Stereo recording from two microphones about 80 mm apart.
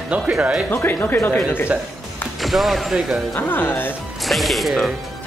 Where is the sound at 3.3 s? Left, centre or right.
Left.